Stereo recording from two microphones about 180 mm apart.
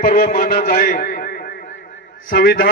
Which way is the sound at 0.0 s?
55° left (ahead or behind).